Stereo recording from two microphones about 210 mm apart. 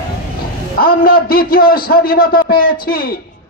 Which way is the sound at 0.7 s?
45° left (ahead or behind).